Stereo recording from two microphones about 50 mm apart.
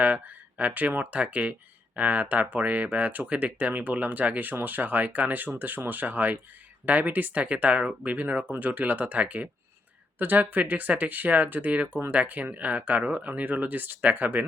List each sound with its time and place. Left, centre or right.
0.0 s speech: right